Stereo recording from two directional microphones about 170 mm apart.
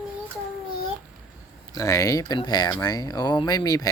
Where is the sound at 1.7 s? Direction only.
20° left (ahead or behind).